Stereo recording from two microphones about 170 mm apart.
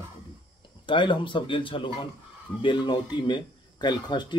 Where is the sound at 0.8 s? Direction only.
30° left (ahead or behind).